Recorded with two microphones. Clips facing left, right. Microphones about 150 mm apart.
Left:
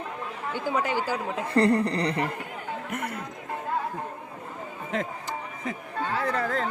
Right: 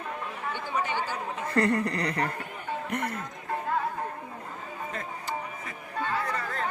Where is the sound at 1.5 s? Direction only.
30° left (ahead or behind).